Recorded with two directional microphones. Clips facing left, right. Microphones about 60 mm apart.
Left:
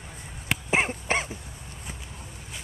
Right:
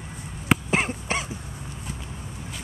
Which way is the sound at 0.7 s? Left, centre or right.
Centre.